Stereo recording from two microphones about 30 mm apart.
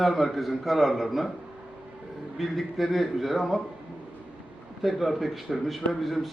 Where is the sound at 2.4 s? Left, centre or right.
Centre.